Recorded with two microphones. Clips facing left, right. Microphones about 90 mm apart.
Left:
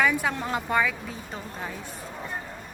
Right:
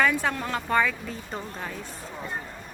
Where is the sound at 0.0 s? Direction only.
10° left (ahead or behind).